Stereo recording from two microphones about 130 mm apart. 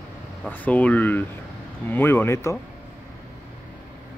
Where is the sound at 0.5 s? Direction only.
10° left (ahead or behind).